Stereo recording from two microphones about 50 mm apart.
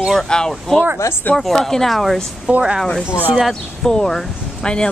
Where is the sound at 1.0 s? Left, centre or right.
Left.